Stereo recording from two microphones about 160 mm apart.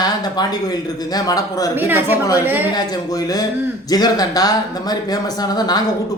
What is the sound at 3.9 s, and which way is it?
Speech, 25° left (ahead or behind).